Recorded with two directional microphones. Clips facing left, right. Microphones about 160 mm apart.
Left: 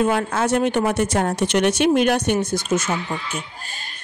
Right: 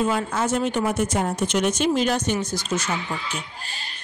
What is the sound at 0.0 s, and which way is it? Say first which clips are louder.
Speech: left 3 dB; 65° left (ahead or behind).